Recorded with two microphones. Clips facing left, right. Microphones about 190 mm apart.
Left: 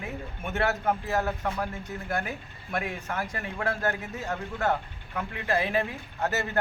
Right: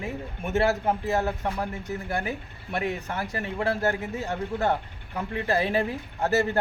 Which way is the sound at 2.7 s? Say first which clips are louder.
Right 2 dB; 30° right (ahead or behind).